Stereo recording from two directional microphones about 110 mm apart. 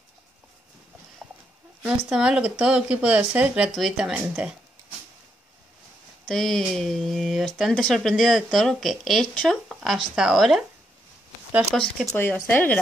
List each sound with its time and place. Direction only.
1.8 s speech: 5° right (ahead or behind)
6.2 s speech: 5° left (ahead or behind)
11.7 s speech: 5° left (ahead or behind)
12.4 s speech: 15° left (ahead or behind)